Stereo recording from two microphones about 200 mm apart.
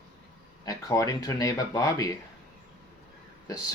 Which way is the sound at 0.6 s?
15° left (ahead or behind).